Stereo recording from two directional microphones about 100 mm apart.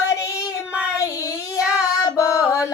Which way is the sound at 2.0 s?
35° left (ahead or behind).